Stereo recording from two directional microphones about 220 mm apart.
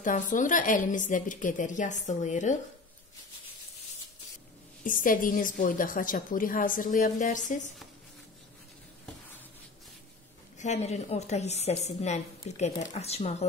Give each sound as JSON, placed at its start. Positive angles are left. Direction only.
{"t": 0.0, "sound": "a woman's voice", "side_deg": 35}
{"t": 4.8, "sound": "a woman's voice", "side_deg": 40}
{"t": 10.6, "sound": "a woman's voice", "side_deg": 30}